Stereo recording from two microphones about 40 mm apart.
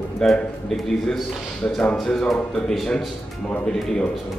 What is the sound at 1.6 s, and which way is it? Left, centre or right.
Speech, left.